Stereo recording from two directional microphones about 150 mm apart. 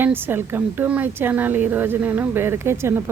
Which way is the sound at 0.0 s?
15° right (ahead or behind).